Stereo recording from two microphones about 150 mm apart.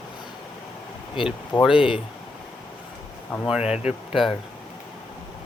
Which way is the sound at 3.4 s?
5° right (ahead or behind).